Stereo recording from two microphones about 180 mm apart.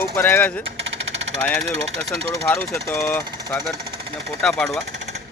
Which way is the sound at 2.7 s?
15° left (ahead or behind).